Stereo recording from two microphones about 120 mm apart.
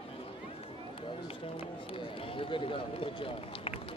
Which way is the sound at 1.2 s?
50° left (ahead or behind).